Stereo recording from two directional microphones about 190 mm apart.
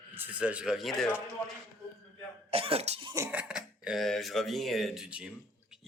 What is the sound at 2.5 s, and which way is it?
Speech, 30° right (ahead or behind).